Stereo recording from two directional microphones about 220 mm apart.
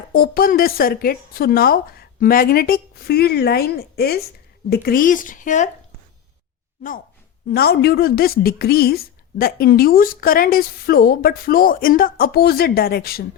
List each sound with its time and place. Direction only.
0.1 s a woman's voice: 40° left (ahead or behind)
7.5 s a woman's voice: 45° left (ahead or behind)